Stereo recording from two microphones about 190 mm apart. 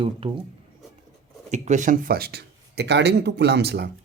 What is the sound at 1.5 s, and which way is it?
Speech, 40° right (ahead or behind).